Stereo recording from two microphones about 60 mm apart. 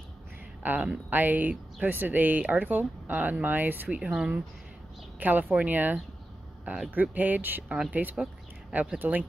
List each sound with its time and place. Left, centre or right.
0.6 s speech: right
4.0 s speech: centre
5.2 s speech: right
7.6 s speech: centre
7.9 s speech: right